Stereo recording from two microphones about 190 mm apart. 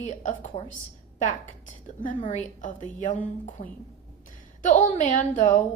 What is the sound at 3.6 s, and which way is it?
Speech, 30° left (ahead or behind).